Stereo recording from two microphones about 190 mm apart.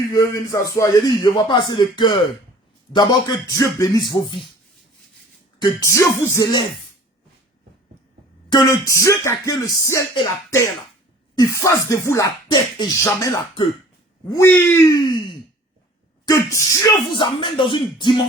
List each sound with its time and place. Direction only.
0.1 s a man's voice: 15° left (ahead or behind)
5.5 s speech: 15° left (ahead or behind)
8.4 s speech: 20° left (ahead or behind)
14.9 s a man's voice: 25° left (ahead or behind)